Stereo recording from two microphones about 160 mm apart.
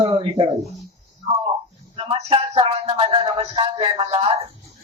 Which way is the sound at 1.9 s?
35° right (ahead or behind).